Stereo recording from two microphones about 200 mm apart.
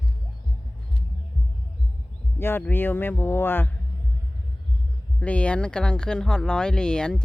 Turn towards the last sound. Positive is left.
turn(degrees=5)  # may be behind; listen again after turning